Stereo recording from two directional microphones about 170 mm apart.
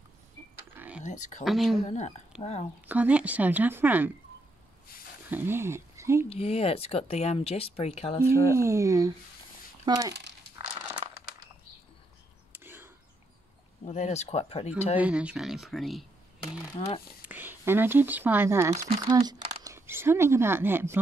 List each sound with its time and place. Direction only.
0.7 s a sound: 10° right (ahead or behind)
1.0 s a sound: 45° left (ahead or behind)
1.4 s speech: centre (ahead or behind)
1.8 s speech: 40° left (ahead or behind)
2.3 s speech: 5° right (ahead or behind)
5.3 s speech: 15° right (ahead or behind)
6.2 s speech: 35° left (ahead or behind)
8.5 s speech: 15° right (ahead or behind)
9.8 s a sound: 20° right (ahead or behind)
12.5 s whispering: 15° right (ahead or behind)
13.8 s speech: 40° left (ahead or behind)
15.0 s speech: 5° right (ahead or behind)
16.8 s speech: 35° left (ahead or behind)
17.3 s speech: 10° right (ahead or behind)